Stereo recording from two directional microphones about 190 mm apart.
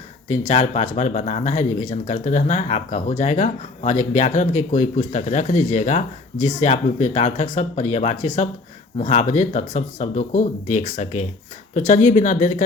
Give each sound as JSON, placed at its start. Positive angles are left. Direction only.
{"t": 0.4, "sound": "speech", "side_deg": 35}